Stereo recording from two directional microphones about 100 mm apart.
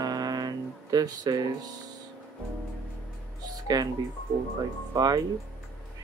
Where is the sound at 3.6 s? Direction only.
40° right (ahead or behind).